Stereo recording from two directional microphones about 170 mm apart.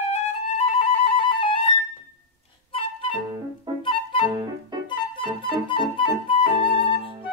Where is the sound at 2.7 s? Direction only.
30° left (ahead or behind).